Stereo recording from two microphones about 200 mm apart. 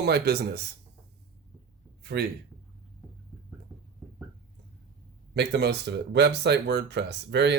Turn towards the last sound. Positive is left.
turn(degrees=-60)  # may be behind; listen again after turning